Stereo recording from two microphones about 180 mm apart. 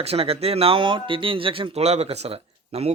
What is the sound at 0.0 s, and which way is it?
Speech, 35° right (ahead or behind).